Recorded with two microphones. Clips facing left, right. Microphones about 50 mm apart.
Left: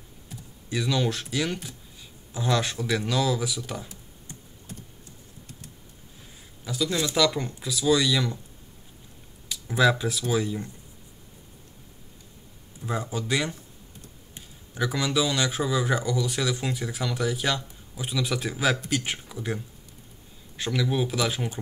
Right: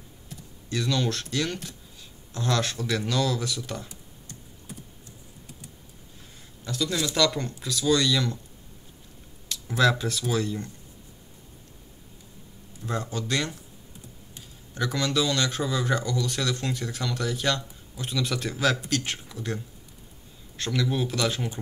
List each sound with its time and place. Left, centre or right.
0.3 s speech: centre
6.6 s a man's voice: centre
6.9 s speech: left
7.2 s speech: centre
9.5 s speech: centre
12.8 s speech: centre
14.7 s speech: centre